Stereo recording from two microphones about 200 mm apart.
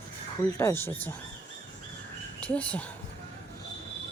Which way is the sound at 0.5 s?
10° left (ahead or behind).